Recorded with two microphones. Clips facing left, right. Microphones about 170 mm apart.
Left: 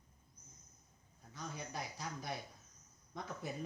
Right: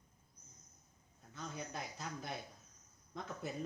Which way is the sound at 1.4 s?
Centre (ahead or behind).